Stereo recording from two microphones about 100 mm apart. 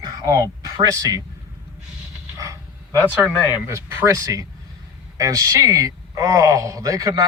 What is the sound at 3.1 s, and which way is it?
Speech, 10° right (ahead or behind).